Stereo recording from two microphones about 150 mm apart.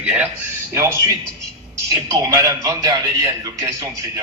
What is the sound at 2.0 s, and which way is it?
Speech, 20° right (ahead or behind).